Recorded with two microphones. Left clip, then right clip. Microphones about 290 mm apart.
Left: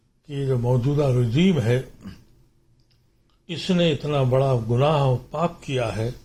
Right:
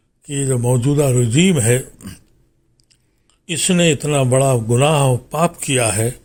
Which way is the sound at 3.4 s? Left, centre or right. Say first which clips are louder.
Right 6 dB; right.